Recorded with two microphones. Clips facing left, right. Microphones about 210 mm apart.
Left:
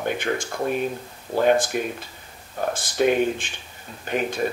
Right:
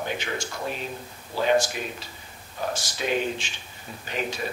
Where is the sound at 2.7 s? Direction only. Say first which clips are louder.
Left 7 dB; 55° left (ahead or behind).